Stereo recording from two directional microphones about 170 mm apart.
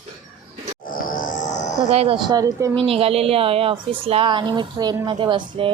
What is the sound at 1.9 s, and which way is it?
Speech, 35° right (ahead or behind).